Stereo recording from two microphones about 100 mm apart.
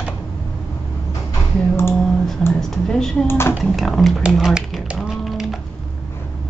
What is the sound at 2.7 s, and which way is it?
Speech, 5° left (ahead or behind).